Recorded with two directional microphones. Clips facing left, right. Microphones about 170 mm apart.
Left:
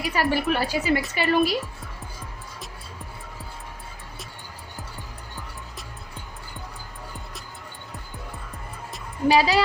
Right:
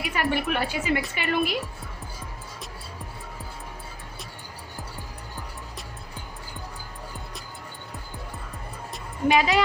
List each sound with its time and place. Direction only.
0.0 s a woman's voice: 35° left (ahead or behind)
9.3 s a woman's voice: 35° left (ahead or behind)